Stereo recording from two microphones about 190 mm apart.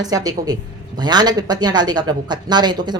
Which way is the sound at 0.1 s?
20° right (ahead or behind).